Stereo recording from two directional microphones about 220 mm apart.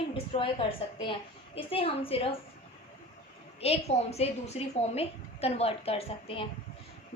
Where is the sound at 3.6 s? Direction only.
30° left (ahead or behind).